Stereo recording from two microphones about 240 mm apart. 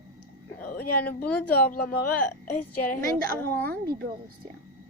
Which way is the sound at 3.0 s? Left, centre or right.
Right.